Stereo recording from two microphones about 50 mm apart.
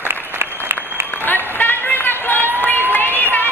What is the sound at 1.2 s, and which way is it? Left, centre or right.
Run, left.